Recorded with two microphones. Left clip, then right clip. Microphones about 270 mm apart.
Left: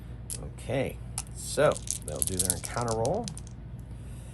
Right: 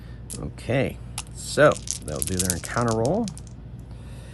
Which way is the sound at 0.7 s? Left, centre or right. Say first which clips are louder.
Right 6 dB; right.